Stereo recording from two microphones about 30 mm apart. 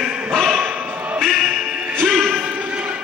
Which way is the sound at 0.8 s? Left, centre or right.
Right.